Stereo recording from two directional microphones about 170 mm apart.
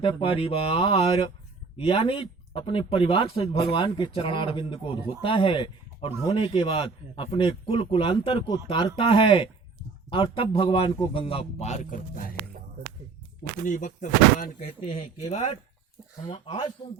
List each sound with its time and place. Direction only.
0.0 s speech: 30° left (ahead or behind); by 12.4 s 55° left (ahead or behind)
13.7 s speech: 50° left (ahead or behind)
14.7 s speech: 35° left (ahead or behind)
16.3 s speech: 25° left (ahead or behind)